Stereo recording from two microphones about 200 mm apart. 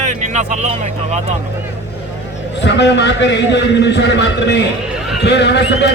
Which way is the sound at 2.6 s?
60° left (ahead or behind).